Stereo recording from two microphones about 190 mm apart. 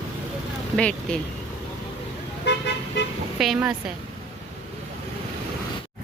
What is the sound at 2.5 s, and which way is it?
Car, 65° left (ahead or behind).